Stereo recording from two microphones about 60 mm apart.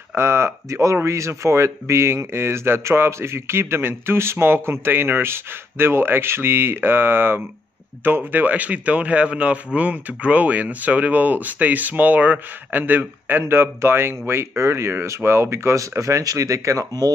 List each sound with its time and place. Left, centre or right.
0.1 s speech: right
13.4 s speech: right